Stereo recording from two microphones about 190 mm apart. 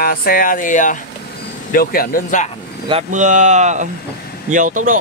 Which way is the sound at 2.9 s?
35° right (ahead or behind).